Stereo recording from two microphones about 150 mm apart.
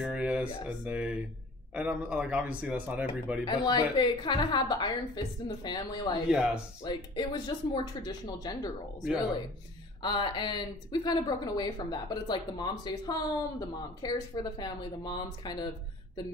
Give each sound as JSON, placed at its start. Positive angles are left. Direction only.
{"t": 0.0, "sound": "speech", "side_deg": -5}
{"t": 3.4, "sound": "speech", "side_deg": 30}
{"t": 10.0, "sound": "speech", "side_deg": 30}